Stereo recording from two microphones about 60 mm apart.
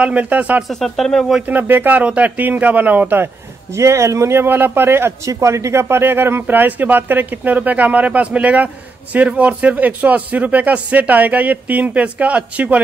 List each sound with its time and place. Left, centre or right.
0.0 s a man's voice: right
0.7 s speech: centre
1.5 s a man's voice: right
3.7 s a man's voice: right
5.2 s a man's voice: right